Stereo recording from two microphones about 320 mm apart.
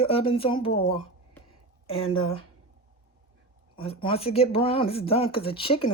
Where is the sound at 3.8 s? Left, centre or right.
Centre.